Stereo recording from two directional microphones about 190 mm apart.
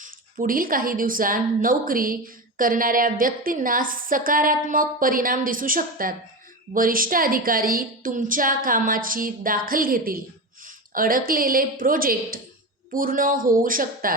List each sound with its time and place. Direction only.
0.0 s a woman's voice: 45° right (ahead or behind)